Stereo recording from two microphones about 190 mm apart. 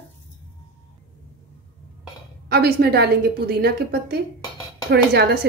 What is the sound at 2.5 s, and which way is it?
A woman's voice, 55° right (ahead or behind).